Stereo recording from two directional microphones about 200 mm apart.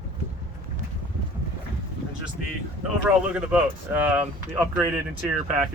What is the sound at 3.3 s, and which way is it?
Speech, 5° right (ahead or behind).